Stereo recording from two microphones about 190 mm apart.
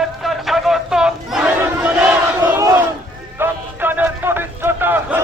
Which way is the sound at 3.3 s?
10° right (ahead or behind).